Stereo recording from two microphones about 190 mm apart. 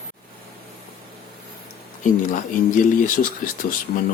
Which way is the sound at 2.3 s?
45° left (ahead or behind).